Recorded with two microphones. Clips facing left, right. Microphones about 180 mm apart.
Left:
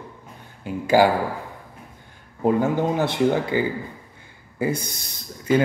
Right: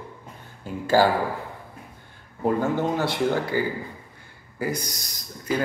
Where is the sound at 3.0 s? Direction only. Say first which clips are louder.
Left 3 dB; 20° left (ahead or behind).